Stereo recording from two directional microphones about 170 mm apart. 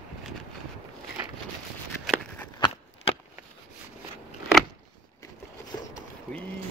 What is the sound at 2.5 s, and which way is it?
Crunch, 25° left (ahead or behind).